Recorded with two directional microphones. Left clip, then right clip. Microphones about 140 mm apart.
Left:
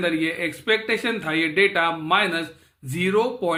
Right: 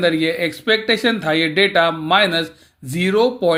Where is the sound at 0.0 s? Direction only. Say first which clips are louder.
Right 6 dB; 35° right (ahead or behind).